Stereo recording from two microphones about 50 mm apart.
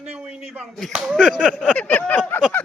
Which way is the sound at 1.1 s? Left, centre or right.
Centre.